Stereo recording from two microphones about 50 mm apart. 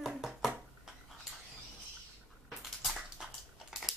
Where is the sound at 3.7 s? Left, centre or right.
Centre.